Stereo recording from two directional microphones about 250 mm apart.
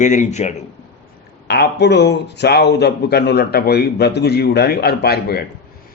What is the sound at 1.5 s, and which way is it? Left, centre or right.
Speech, left.